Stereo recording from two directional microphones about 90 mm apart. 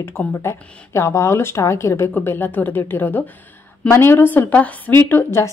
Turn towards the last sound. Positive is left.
turn(degrees=30)  # may be behind; listen again after turning